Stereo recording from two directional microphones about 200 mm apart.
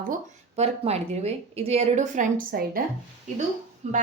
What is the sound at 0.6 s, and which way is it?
A woman's voice, 30° right (ahead or behind).